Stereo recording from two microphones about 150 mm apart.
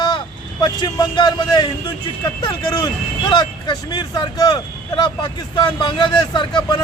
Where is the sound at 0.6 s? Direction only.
30° left (ahead or behind).